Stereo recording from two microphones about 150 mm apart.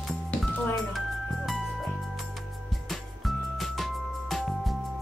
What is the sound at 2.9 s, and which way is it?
Music, centre (ahead or behind).